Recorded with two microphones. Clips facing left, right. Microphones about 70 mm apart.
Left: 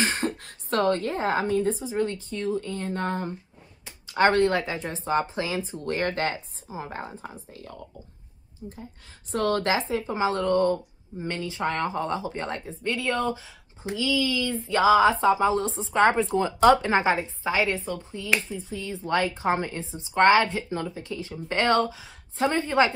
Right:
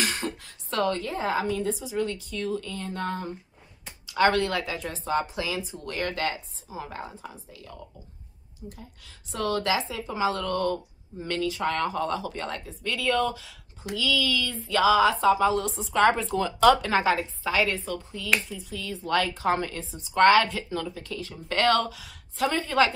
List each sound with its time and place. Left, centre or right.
0.0 s a woman's voice: left
8.6 s a woman's voice: centre
9.3 s speech: left